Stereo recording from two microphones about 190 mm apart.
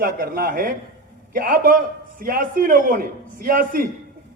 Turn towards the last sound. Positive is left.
turn(degrees=-45)  # may be behind; listen again after turning